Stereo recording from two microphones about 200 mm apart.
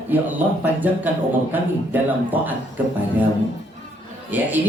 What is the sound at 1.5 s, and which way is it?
A woman's voice, 10° right (ahead or behind).